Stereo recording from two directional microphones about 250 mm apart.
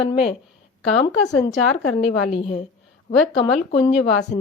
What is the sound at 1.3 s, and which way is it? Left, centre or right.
Speech, centre.